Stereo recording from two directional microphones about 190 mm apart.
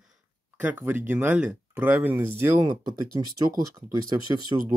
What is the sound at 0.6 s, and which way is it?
Speech, 10° right (ahead or behind).